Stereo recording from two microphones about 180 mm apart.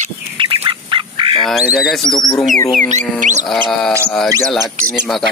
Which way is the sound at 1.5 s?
Centre (ahead or behind).